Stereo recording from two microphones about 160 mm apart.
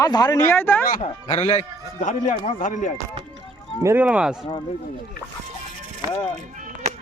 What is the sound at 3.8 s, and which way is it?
Speech, 10° right (ahead or behind).